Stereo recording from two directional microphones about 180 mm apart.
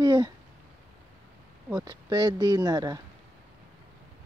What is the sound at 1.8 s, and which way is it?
Speech, 25° right (ahead or behind).